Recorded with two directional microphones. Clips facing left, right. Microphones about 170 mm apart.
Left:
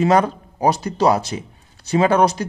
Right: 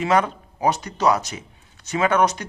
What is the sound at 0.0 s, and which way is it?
Speech, 35° left (ahead or behind).